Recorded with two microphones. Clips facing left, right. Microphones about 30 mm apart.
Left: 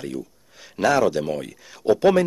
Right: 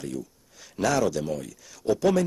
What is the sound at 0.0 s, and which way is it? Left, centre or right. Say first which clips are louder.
Speech: left 3 dB; left.